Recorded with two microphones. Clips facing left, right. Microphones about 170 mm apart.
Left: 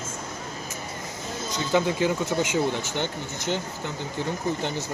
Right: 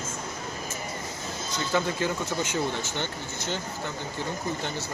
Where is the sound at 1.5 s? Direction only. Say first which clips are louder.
Left 4 dB; 15° left (ahead or behind).